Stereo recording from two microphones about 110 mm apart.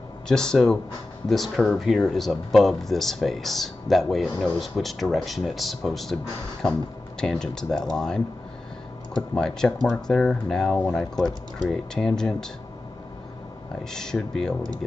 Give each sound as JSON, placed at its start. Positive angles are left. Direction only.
{"t": 0.3, "sound": "speech", "side_deg": 5}
{"t": 7.2, "sound": "speech", "side_deg": 5}
{"t": 9.3, "sound": "speech", "side_deg": 5}
{"t": 13.8, "sound": "speech", "side_deg": 5}